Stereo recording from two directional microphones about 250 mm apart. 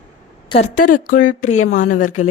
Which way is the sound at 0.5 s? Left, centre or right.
Left.